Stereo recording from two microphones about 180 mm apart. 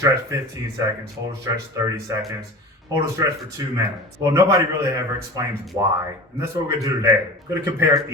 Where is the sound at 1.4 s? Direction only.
20° right (ahead or behind).